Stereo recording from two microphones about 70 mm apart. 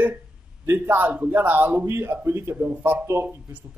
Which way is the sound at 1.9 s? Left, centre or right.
Right.